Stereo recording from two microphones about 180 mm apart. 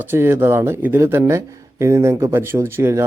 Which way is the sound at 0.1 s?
15° right (ahead or behind).